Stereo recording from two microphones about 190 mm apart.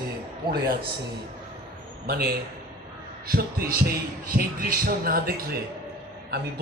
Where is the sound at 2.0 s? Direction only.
55° right (ahead or behind).